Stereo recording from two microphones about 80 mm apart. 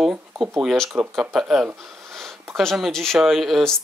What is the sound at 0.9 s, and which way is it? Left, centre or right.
Speech, centre.